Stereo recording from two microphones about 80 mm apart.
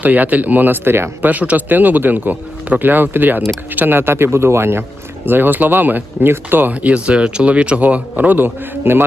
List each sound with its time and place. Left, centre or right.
0.0 s speech: right
1.3 s speech: centre